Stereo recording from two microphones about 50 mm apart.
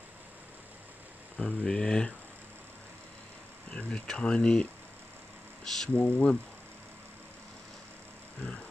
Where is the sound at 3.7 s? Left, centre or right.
Centre.